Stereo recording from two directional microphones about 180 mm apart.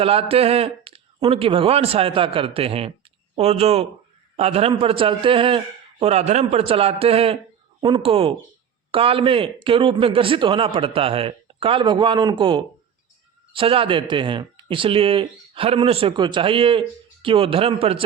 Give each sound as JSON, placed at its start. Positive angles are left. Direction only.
{"t": 0.0, "sound": "speech", "side_deg": -30}